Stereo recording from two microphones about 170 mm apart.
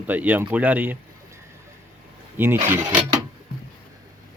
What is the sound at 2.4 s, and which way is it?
Speech, 10° right (ahead or behind).